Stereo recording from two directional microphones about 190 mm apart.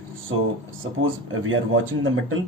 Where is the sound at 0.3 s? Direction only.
90° right.